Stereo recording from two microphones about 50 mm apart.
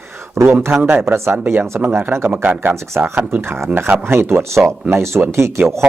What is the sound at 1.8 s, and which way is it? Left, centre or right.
Speech, right.